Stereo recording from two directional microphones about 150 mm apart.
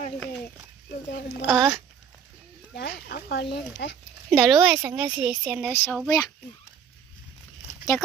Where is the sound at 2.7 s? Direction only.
90° left.